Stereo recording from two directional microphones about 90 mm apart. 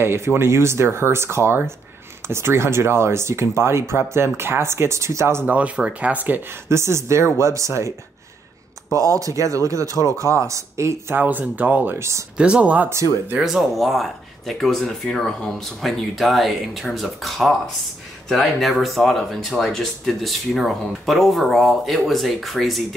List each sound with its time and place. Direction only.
0.0 s speech: 25° right (ahead or behind)
5.5 s speech: 15° right (ahead or behind)
6.7 s speech: 30° right (ahead or behind)
8.9 s speech: 35° right (ahead or behind)
11.1 s speech: 20° right (ahead or behind)
12.4 s speech: 10° right (ahead or behind)
13.4 s speech: 5° right (ahead or behind)